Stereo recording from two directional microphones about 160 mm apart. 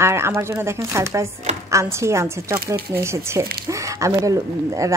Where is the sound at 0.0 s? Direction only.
15° right (ahead or behind).